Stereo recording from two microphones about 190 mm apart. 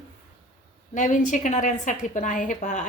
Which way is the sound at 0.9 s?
40° left (ahead or behind).